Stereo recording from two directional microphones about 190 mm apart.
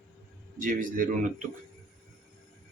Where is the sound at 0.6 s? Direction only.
45° right (ahead or behind).